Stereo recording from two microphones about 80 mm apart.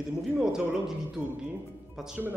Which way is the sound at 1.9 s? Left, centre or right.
Centre.